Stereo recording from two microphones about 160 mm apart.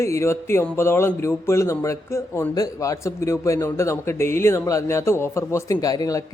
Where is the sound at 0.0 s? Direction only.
15° left (ahead or behind).